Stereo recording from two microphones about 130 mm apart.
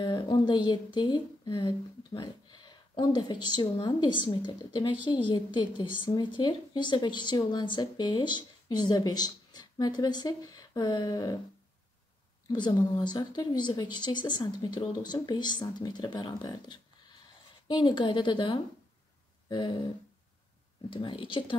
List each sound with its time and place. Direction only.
0.0 s speech: 35° left (ahead or behind)
12.5 s speech: 35° left (ahead or behind)
20.9 s speech: 40° left (ahead or behind)